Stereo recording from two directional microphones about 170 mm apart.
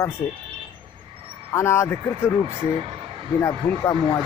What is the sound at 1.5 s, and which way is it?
Speech, 15° left (ahead or behind).